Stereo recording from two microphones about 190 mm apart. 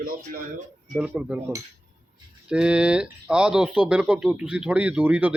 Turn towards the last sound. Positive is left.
turn(degrees=-10)  # may be behind; listen again after turning